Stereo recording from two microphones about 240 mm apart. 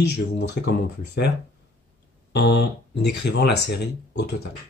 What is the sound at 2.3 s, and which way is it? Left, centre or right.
Speech, left.